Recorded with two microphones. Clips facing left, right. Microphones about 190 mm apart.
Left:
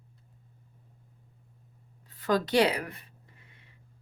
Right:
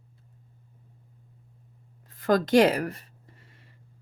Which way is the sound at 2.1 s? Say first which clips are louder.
Right 5 dB; 50° right (ahead or behind).